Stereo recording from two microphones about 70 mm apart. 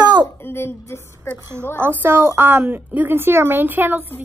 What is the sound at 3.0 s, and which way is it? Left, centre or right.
A woman's voice, right.